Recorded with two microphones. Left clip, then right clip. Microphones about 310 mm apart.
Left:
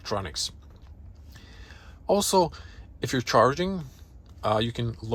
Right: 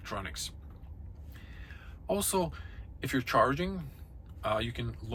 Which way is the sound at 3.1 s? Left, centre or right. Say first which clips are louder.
Left 6 dB; centre.